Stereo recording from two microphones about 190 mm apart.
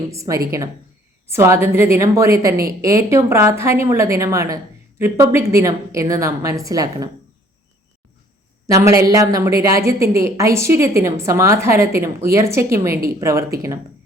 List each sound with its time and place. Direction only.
0.1 s a woman's voice: 15° right (ahead or behind)
8.6 s a woman's voice: 15° right (ahead or behind)